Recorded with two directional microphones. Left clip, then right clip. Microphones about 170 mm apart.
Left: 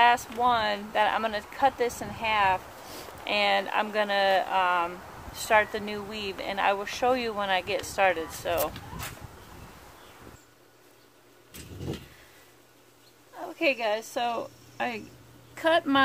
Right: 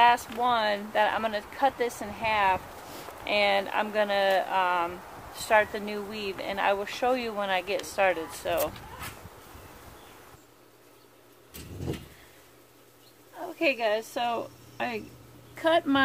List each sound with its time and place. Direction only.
0.0 s speech: 25° left (ahead or behind)
13.4 s a woman's voice: 30° left (ahead or behind)